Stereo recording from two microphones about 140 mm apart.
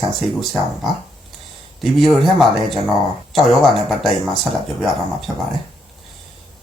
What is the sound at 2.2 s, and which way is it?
Speech, centre (ahead or behind).